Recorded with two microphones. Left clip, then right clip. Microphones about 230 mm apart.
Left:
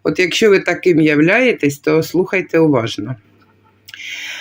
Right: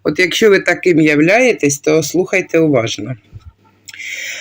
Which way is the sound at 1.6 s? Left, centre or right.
Left.